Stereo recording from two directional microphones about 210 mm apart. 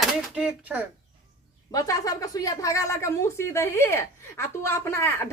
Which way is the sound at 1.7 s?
15° left (ahead or behind).